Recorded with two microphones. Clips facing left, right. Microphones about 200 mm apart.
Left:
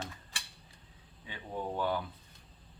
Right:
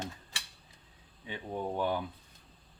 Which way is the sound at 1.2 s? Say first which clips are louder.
Right 2 dB; 25° right (ahead or behind).